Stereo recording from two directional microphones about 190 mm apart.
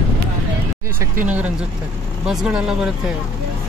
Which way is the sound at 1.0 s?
10° right (ahead or behind).